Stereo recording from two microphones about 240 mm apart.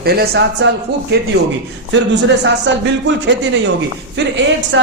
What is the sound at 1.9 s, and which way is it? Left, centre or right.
Speech, right.